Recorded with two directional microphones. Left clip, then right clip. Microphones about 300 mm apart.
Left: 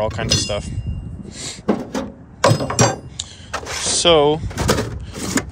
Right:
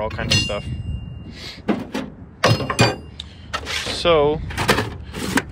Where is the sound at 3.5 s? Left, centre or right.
Left.